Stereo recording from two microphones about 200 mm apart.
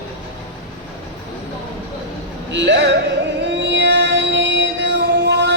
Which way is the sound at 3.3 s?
60° right (ahead or behind).